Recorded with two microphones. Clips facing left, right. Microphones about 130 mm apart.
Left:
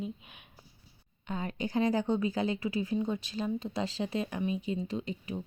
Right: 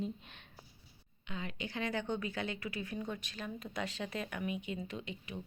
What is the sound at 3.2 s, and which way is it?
Speech, 30° left (ahead or behind).